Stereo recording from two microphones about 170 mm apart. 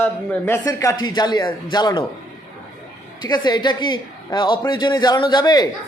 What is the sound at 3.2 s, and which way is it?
A man's voice, 25° left (ahead or behind).